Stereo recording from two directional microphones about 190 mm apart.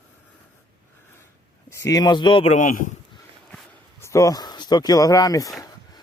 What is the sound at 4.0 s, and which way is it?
Speech, 15° left (ahead or behind).